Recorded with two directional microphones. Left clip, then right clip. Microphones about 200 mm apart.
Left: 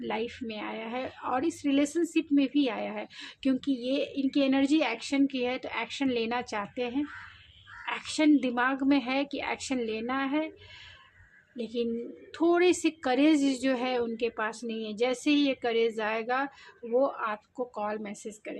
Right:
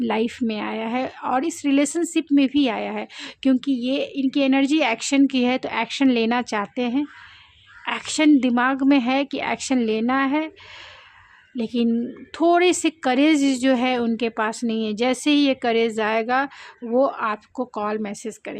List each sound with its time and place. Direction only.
0.0 s a woman's voice: 45° right (ahead or behind)
11.5 s a woman's voice: 45° right (ahead or behind)